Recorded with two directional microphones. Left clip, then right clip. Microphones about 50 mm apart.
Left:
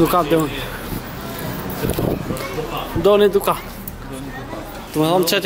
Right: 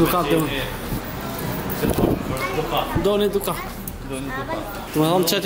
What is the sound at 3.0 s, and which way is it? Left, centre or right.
Speech, left.